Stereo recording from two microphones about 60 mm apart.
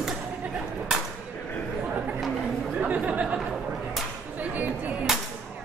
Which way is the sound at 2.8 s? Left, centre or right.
Right.